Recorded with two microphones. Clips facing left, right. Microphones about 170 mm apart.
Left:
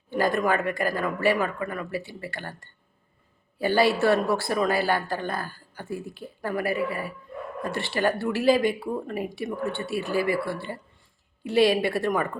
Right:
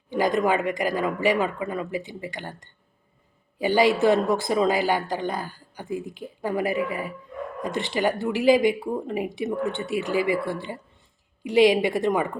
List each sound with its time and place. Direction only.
0.1 s speech: 15° right (ahead or behind)